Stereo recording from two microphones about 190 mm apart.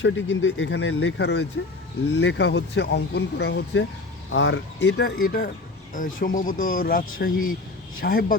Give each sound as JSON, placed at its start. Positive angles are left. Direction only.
{"t": 0.0, "sound": "speech", "side_deg": 85}
{"t": 4.3, "sound": "speech", "side_deg": 80}